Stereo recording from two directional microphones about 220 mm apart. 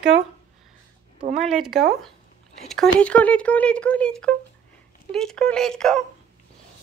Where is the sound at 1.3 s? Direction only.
Centre (ahead or behind).